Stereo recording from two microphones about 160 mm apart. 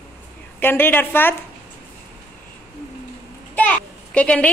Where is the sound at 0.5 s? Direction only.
15° left (ahead or behind).